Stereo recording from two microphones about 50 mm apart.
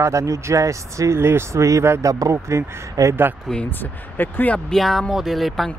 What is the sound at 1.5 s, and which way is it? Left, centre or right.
Speech, right.